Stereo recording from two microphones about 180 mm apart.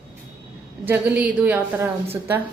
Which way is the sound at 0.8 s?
10° right (ahead or behind).